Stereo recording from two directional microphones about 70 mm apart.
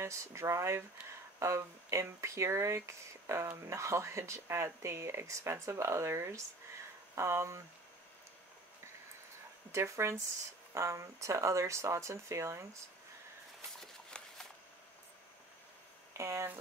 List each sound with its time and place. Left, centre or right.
0.0 s speech: right
9.7 s speech: right
13.7 s a sound: centre
16.1 s speech: right